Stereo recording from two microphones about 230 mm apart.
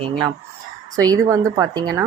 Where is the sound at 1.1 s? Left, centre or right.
Centre.